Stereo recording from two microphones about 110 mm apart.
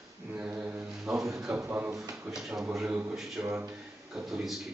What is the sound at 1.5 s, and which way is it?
Speech, 20° right (ahead or behind).